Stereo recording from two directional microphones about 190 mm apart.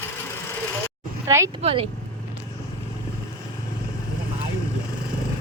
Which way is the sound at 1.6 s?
30° right (ahead or behind).